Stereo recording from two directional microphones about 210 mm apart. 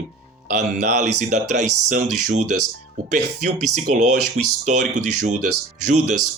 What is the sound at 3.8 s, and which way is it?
Speech, 35° right (ahead or behind).